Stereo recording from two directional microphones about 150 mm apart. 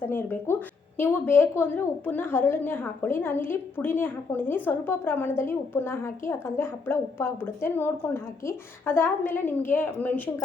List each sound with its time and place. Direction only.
0.0 s a woman's voice: 15° left (ahead or behind)